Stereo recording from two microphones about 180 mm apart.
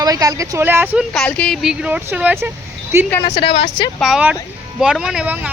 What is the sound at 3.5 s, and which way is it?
Speech, 35° left (ahead or behind).